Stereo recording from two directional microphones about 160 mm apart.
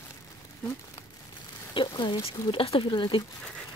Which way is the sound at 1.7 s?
30° left (ahead or behind).